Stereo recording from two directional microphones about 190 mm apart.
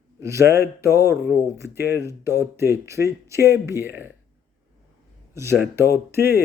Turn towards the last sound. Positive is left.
turn(degrees=-10)  # may be behind; listen again after turning